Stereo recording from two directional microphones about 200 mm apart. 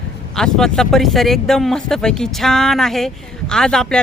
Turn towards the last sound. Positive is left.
turn(degrees=5)  # may be behind; listen again after turning